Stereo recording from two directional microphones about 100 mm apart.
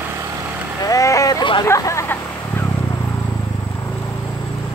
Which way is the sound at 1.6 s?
30° left (ahead or behind).